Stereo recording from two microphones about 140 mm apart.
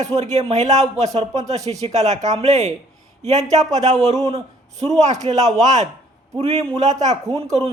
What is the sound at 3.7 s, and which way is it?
A man's voice, 55° right (ahead or behind).